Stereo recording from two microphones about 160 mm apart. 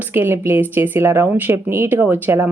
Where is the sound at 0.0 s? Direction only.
15° right (ahead or behind).